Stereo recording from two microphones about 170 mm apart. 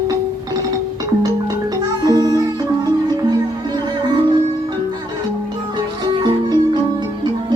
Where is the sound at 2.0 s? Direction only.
25° right (ahead or behind).